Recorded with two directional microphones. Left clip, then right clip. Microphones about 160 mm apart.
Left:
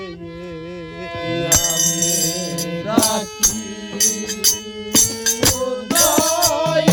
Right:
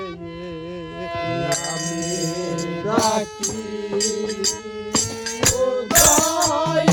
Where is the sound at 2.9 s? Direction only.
60° left (ahead or behind).